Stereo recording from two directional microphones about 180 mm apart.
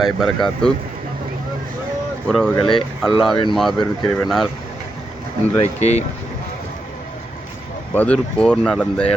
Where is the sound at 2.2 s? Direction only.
5° left (ahead or behind).